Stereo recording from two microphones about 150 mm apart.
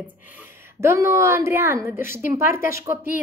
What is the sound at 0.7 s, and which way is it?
A woman's voice, 20° right (ahead or behind).